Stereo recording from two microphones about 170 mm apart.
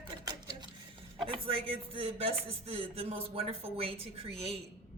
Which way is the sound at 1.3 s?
35° right (ahead or behind).